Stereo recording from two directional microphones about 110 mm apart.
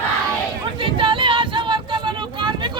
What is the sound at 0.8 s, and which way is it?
Vehicle, 50° right (ahead or behind).